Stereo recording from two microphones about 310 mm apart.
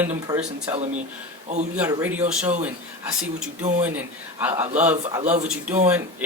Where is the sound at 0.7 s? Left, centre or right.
Right.